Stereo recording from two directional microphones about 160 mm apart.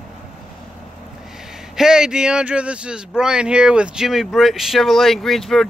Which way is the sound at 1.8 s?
5° right (ahead or behind).